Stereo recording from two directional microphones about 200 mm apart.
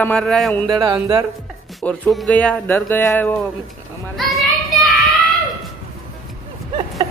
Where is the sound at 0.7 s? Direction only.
20° right (ahead or behind).